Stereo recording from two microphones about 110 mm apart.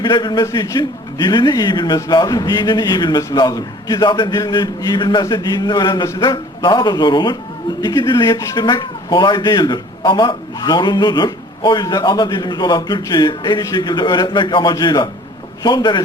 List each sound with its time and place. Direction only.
0.0 s speech: 40° left (ahead or behind)